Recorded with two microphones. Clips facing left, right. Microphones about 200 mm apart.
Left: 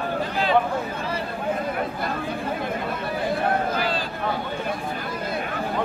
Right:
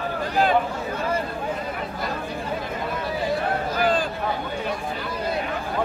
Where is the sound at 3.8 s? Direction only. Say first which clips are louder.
Right 4 dB; 50° right (ahead or behind).